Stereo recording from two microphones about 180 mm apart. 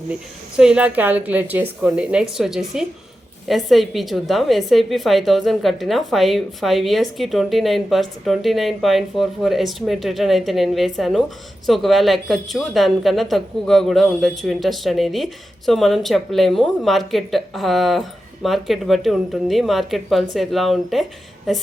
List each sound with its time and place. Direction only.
0.5 s a woman's voice: 5° right (ahead or behind)